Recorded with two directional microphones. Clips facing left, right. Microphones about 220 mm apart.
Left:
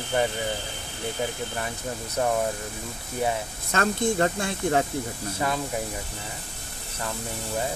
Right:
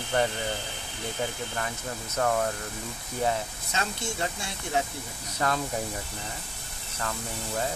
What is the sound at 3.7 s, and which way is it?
Speech, 55° left (ahead or behind).